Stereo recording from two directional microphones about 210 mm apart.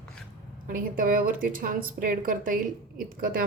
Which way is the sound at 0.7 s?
40° right (ahead or behind).